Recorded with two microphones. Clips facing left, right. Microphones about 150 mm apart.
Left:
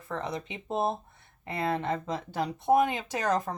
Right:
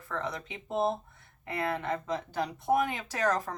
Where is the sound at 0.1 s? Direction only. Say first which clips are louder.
Left 2 dB; 20° left (ahead or behind).